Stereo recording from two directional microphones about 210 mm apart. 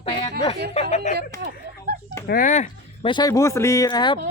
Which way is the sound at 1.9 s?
50° right (ahead or behind).